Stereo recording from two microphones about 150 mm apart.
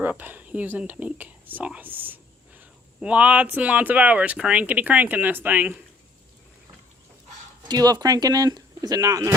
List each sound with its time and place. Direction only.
0.0 s speech: 10° right (ahead or behind)
7.7 s speech: 25° right (ahead or behind)